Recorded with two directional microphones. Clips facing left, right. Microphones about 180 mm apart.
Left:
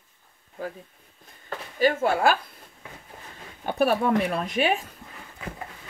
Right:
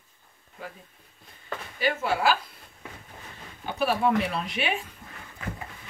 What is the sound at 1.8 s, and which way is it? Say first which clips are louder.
Speech: left 4 dB; 45° left (ahead or behind).